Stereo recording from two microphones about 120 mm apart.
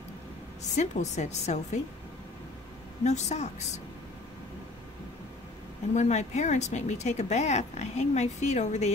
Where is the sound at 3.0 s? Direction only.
70° left (ahead or behind).